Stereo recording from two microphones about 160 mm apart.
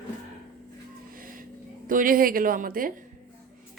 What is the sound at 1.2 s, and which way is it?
Music, 60° right (ahead or behind).